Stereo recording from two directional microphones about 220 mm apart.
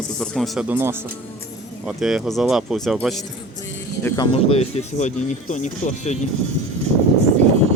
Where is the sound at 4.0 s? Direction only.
10° left (ahead or behind).